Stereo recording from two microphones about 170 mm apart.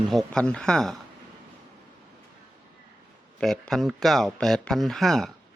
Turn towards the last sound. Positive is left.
turn(degrees=0)  # may be behind; listen again after turning